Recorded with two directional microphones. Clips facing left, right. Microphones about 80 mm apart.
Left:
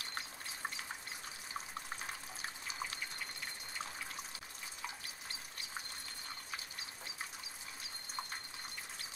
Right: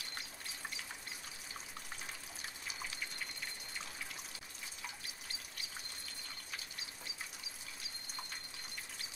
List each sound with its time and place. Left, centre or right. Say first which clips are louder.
2.0 s water: left 3 dB; left